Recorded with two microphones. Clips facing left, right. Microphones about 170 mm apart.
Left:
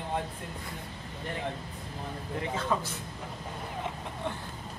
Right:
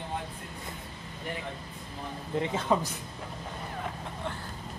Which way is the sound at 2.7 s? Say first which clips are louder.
Right 4 dB; 15° right (ahead or behind).